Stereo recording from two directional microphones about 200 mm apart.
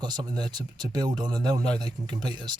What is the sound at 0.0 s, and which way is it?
Speech, 20° right (ahead or behind).